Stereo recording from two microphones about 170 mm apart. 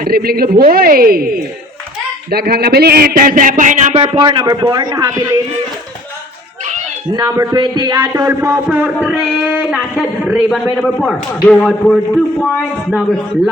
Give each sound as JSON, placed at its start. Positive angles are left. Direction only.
{"t": 0.0, "sound": "speech", "side_deg": -65}
{"t": 7.1, "sound": "speech", "side_deg": -20}
{"t": 9.0, "sound": "a sound", "side_deg": -10}
{"t": 10.0, "sound": "speech", "side_deg": 0}